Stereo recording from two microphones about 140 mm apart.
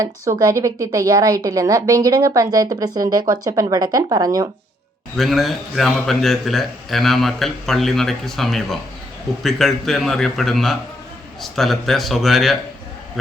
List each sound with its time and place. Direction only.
0.0 s a woman's voice: 25° right (ahead or behind)
5.1 s a man's voice: centre (ahead or behind)